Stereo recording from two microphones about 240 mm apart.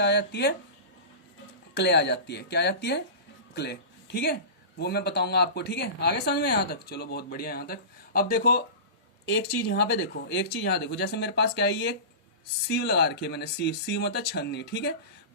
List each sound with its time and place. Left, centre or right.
0.0 s speech: left
1.7 s a man's voice: left